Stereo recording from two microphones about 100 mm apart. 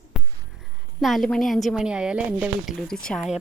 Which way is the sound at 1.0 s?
Centre (ahead or behind).